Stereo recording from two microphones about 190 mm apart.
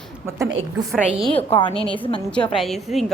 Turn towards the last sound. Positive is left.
turn(degrees=0)  # may be behind; listen again after turning